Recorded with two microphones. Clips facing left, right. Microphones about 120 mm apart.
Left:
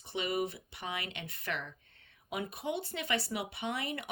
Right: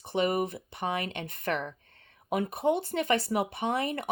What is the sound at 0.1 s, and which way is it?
Speech, 50° right (ahead or behind).